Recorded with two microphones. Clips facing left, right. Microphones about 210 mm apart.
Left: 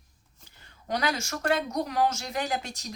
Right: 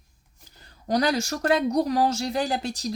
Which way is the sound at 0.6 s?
35° right (ahead or behind).